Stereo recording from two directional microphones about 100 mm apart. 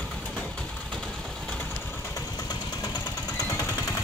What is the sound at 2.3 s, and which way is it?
Engine, 40° left (ahead or behind).